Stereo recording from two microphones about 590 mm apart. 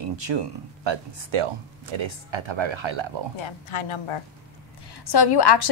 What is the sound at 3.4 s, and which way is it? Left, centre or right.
Speech, left.